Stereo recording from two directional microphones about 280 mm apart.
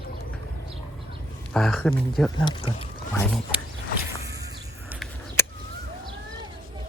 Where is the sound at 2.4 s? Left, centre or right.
Centre.